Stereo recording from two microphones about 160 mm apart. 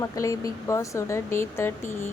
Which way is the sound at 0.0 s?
20° left (ahead or behind).